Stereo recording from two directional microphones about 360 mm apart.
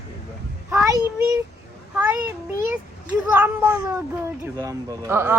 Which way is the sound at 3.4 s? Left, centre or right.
Centre.